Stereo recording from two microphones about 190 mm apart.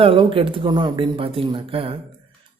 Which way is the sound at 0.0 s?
25° right (ahead or behind).